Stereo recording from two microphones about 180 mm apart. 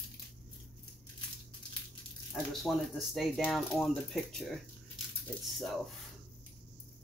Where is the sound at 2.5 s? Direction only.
Centre (ahead or behind).